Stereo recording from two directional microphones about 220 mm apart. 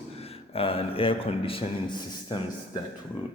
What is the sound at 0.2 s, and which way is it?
Speech, 25° left (ahead or behind).